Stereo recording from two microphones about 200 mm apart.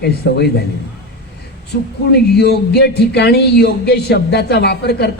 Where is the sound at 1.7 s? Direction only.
55° left (ahead or behind).